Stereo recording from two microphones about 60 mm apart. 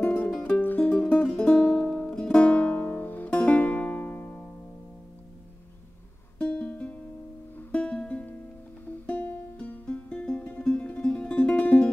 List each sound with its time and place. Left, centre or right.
0.0 s music: left
6.3 s music: left
9.6 s music: centre